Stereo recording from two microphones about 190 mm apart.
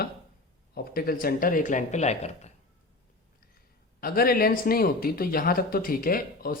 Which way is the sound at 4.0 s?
50° left (ahead or behind).